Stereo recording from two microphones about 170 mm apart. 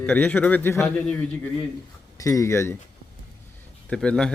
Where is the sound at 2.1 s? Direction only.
20° left (ahead or behind).